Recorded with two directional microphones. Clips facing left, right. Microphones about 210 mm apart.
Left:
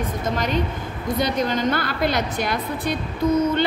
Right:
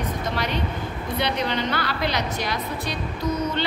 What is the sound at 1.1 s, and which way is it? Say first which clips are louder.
A woman's voice: left 3 dB; 45° left (ahead or behind).